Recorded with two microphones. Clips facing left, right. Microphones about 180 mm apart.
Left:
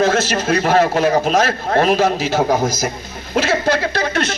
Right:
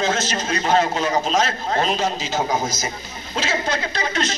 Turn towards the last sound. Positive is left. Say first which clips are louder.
# left 5 dB
turn(degrees=60)  # may be behind; listen again after turning